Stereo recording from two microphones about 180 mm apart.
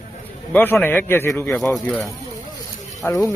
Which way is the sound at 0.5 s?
10° left (ahead or behind).